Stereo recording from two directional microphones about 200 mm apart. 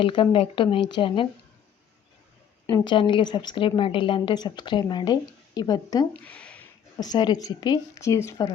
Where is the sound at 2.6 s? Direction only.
25° left (ahead or behind).